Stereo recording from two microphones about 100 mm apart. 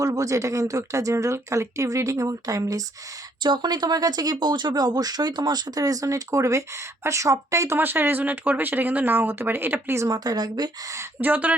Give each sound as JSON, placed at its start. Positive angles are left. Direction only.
{"t": 0.0, "sound": "speech", "side_deg": -35}
{"t": 3.4, "sound": "speech", "side_deg": -50}
{"t": 7.8, "sound": "speech", "side_deg": -20}
{"t": 11.2, "sound": "speech", "side_deg": -15}